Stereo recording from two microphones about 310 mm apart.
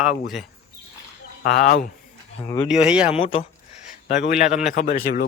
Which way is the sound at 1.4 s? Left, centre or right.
Left.